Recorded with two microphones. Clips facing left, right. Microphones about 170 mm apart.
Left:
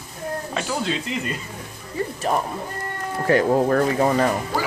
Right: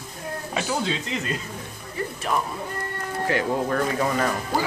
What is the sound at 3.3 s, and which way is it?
Speech, 40° left (ahead or behind).